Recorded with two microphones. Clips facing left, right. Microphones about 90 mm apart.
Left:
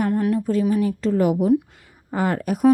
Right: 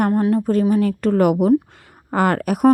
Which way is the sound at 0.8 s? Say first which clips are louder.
Right 3 dB; 65° right (ahead or behind).